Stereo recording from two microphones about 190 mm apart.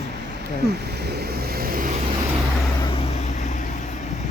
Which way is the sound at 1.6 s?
50° right (ahead or behind).